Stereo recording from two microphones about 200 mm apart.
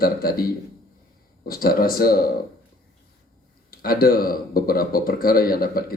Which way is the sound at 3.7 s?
45° left (ahead or behind).